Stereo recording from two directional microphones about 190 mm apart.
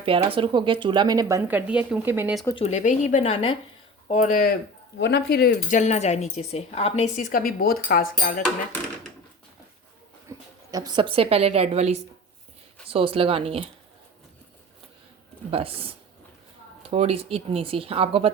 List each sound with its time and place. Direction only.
0.0 s speech: 30° right (ahead or behind); by 2.3 s 10° right (ahead or behind)
2.6 s a woman's voice: 35° left (ahead or behind)
4.9 s speech: 65° left (ahead or behind)
5.7 s a woman's voice: 35° left (ahead or behind)
10.2 s a woman's voice: 20° right (ahead or behind)
15.4 s speech: 30° right (ahead or behind)